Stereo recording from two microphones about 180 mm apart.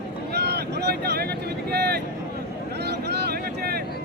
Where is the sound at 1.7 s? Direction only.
65° right (ahead or behind).